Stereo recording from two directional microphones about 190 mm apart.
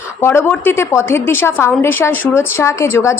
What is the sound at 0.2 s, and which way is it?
A woman's voice, 10° left (ahead or behind).